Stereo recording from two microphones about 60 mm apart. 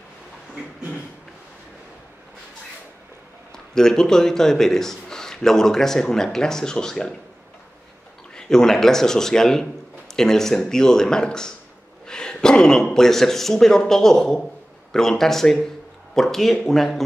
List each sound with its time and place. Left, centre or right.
3.5 s a man's voice: centre
8.4 s a man's voice: centre
12.1 s a sound: centre
12.9 s a man's voice: centre